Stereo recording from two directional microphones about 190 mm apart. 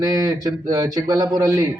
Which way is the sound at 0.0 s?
20° right (ahead or behind).